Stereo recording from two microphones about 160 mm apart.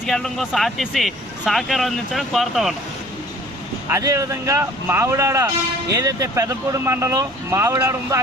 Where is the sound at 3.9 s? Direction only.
20° right (ahead or behind).